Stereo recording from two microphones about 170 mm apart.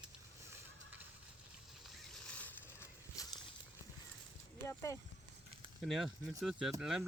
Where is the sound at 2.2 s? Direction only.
10° left (ahead or behind).